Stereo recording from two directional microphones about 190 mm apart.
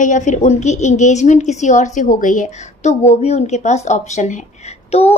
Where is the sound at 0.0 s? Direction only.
40° left (ahead or behind).